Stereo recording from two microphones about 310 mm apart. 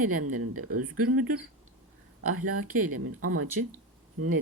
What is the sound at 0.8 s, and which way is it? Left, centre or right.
Speech, right.